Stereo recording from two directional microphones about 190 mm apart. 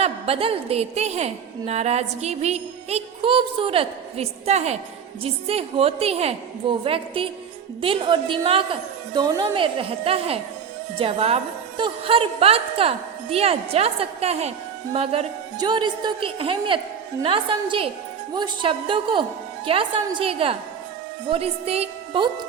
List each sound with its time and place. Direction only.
0.0 s a woman's voice: 30° right (ahead or behind)